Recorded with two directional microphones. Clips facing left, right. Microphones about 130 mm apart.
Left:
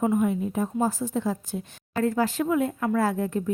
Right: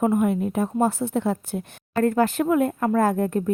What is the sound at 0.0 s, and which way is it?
A woman's voice, 60° right (ahead or behind).